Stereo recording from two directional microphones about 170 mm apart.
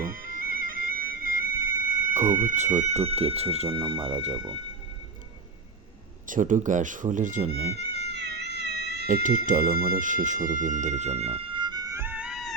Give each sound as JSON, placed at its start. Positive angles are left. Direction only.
{"t": 0.0, "sound": "bagpipes", "side_deg": -55}
{"t": 2.3, "sound": "speech", "side_deg": -50}
{"t": 6.2, "sound": "speech", "side_deg": -50}
{"t": 7.5, "sound": "cat", "side_deg": -70}
{"t": 9.0, "sound": "speech", "side_deg": -60}